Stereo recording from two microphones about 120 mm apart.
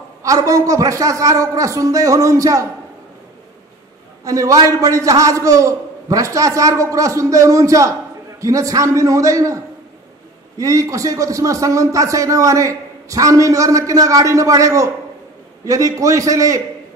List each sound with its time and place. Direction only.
0.2 s speech: 25° right (ahead or behind)
4.2 s speech: 30° right (ahead or behind)
10.6 s speech: 25° right (ahead or behind)